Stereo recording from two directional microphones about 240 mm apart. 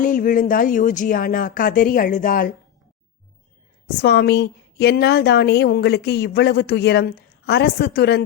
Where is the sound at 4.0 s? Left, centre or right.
Left.